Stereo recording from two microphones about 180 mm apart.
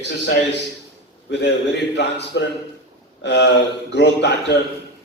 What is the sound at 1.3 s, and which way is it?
A man's voice, 70° left (ahead or behind).